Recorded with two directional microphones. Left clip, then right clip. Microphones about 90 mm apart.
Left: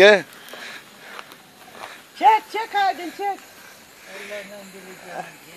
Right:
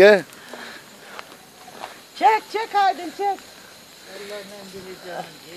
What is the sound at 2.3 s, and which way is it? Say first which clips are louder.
Speech: even; 45° left (ahead or behind).